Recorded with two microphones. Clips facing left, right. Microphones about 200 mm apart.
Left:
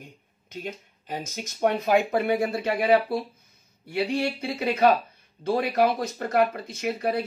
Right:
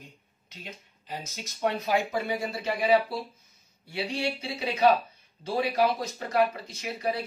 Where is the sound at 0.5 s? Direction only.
50° left (ahead or behind).